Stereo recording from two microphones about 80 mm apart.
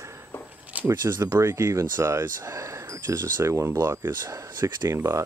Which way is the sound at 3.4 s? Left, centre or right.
Right.